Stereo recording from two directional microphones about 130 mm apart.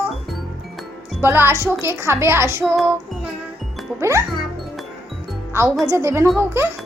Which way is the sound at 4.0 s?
20° right (ahead or behind).